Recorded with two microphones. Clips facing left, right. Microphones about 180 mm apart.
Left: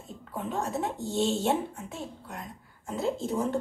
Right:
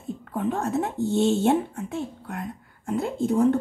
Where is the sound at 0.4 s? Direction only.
55° right (ahead or behind).